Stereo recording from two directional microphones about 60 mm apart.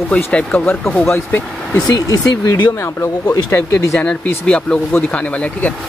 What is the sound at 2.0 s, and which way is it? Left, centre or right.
Speech, left.